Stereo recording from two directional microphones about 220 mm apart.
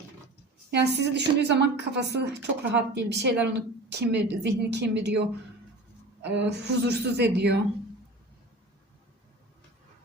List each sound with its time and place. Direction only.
0.7 s a woman's voice: 50° right (ahead or behind)